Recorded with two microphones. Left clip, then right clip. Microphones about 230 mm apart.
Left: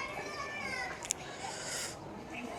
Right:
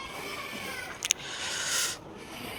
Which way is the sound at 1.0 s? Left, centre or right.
Centre.